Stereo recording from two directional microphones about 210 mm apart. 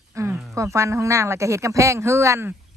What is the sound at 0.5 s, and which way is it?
Speech, 15° right (ahead or behind).